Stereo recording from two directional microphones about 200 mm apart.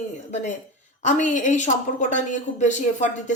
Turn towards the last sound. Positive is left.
turn(degrees=35)  # may be behind; listen again after turning